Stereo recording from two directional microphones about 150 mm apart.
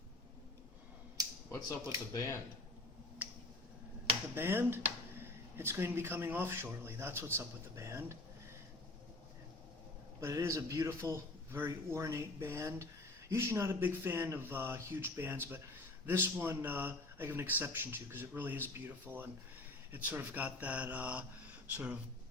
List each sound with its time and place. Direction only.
1.2 s a sound: 25° right (ahead or behind)
2.1 s speech: 20° left (ahead or behind)
3.2 s finger snapping: 10° right (ahead or behind)
4.4 s a man's voice: 15° right (ahead or behind)
10.2 s a man's voice: 20° right (ahead or behind)